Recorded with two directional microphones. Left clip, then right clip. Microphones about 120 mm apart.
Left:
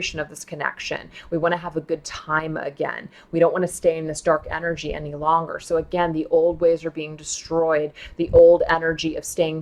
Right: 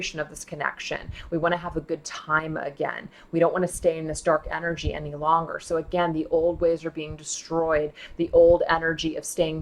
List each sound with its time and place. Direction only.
0.0 s speech: 40° left (ahead or behind)